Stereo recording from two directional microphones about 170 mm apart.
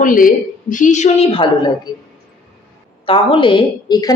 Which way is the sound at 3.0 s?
30° left (ahead or behind).